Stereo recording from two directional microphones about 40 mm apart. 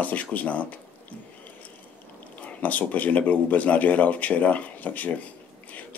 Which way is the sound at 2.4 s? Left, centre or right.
Left.